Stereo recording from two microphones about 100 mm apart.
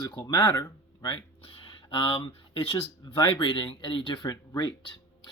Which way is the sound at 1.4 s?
60° left (ahead or behind).